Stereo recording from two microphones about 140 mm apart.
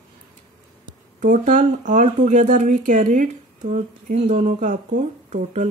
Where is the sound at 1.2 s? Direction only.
65° right (ahead or behind).